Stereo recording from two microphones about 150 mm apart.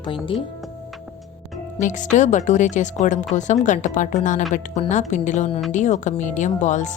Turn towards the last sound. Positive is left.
turn(degrees=55)  # may be behind; listen again after turning